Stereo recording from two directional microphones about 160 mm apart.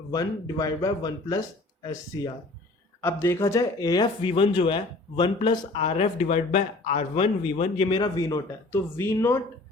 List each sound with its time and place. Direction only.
0.1 s speech: 20° left (ahead or behind)
3.0 s speech: 15° left (ahead or behind); by 7.3 s 45° left (ahead or behind)
7.8 s speech: 30° left (ahead or behind); by 9.4 s 15° left (ahead or behind)